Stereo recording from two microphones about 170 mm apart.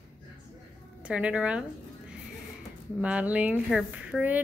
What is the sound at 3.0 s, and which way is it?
Speech, 10° right (ahead or behind).